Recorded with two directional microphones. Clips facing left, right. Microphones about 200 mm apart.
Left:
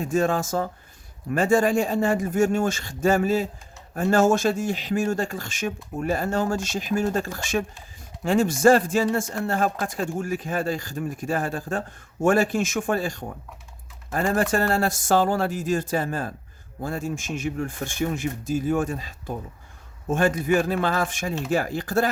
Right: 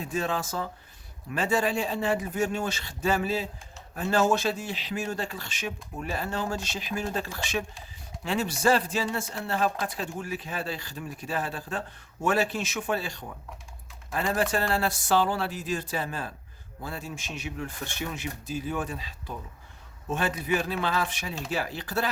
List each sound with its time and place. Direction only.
0.0 s speech: 45° left (ahead or behind)